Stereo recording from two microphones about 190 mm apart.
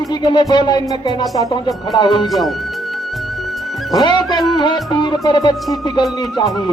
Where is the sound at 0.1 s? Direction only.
25° left (ahead or behind).